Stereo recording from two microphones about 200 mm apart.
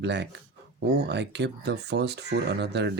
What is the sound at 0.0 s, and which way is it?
Speech, 60° right (ahead or behind).